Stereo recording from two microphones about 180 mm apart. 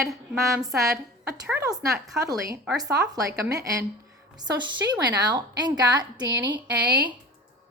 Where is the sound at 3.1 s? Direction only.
20° right (ahead or behind).